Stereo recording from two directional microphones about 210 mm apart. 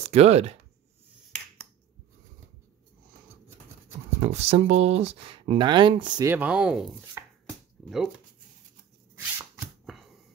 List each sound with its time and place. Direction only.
0.1 s speech: 30° right (ahead or behind)
4.2 s speech: 30° right (ahead or behind); by 6.9 s 5° right (ahead or behind)
7.8 s a sound: centre (ahead or behind)
9.1 s shuffling cards: 10° right (ahead or behind)
9.8 s typewriter: centre (ahead or behind)